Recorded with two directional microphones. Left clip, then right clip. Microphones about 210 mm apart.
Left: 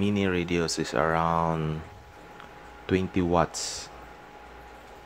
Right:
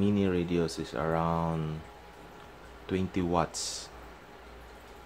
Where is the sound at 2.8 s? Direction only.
20° left (ahead or behind).